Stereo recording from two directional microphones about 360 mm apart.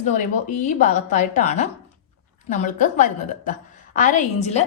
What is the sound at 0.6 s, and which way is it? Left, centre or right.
A woman's voice, centre.